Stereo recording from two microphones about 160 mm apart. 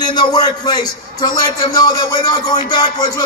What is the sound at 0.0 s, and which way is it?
A man's voice, 25° left (ahead or behind).